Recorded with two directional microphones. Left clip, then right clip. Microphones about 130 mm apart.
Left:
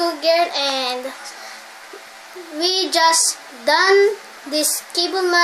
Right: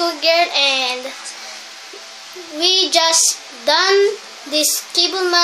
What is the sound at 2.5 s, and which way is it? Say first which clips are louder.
Child singing: right 3 dB; 20° left (ahead or behind).